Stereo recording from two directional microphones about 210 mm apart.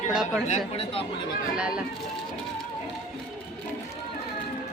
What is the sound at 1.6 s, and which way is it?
Speech, 5° right (ahead or behind).